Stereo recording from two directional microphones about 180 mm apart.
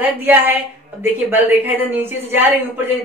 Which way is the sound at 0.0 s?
10° right (ahead or behind).